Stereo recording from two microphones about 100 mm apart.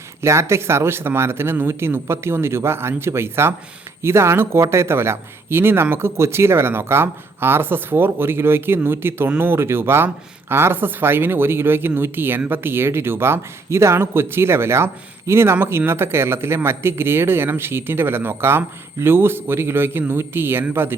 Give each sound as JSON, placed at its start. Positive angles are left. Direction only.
{"t": 0.2, "sound": "speech", "side_deg": -25}